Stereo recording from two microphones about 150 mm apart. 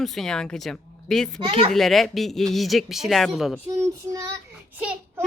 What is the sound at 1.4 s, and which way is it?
Speech, 30° right (ahead or behind).